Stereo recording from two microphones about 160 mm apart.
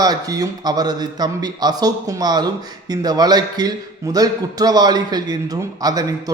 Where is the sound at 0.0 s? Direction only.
25° right (ahead or behind).